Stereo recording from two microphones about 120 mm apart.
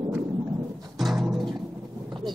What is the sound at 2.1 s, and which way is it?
Thunder, 40° right (ahead or behind).